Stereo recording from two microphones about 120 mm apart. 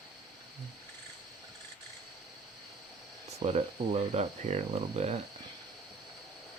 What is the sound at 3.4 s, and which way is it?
Speech, 60° right (ahead or behind).